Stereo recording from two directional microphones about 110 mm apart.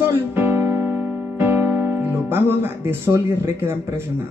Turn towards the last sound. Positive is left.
turn(degrees=-20)  # may be behind; listen again after turning